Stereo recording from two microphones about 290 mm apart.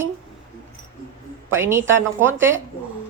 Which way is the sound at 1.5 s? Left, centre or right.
Centre.